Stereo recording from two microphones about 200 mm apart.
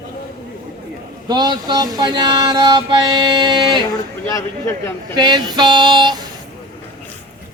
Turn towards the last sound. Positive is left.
turn(degrees=-20)  # may be behind; listen again after turning